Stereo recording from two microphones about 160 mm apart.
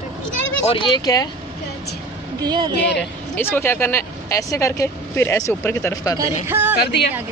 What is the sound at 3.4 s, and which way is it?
A woman's voice, 15° left (ahead or behind).